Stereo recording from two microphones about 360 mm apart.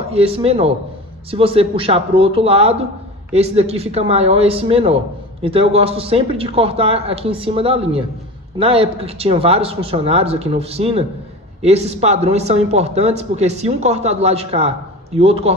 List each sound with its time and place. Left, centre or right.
0.1 s a man's voice: centre